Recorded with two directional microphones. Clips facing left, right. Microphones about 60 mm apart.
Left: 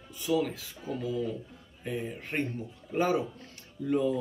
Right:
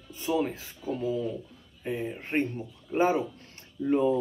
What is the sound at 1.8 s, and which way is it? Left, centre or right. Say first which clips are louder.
Speech: right 3 dB; right.